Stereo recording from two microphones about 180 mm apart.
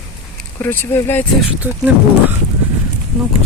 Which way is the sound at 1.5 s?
10° right (ahead or behind).